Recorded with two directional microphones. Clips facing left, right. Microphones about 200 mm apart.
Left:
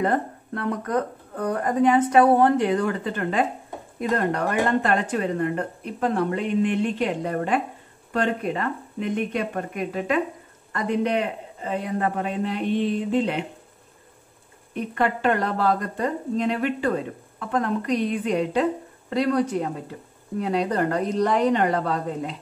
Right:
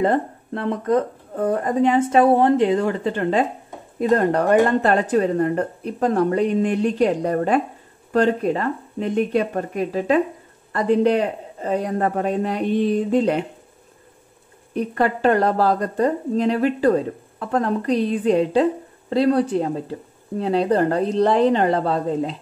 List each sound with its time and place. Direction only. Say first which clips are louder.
0.0 s a woman's voice: right 4 dB; 25° right (ahead or behind); by 13.5 s 40° right (ahead or behind)
14.7 s a woman's voice: right 4 dB; 35° right (ahead or behind)